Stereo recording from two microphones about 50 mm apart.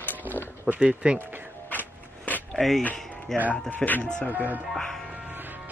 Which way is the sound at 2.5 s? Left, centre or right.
Centre.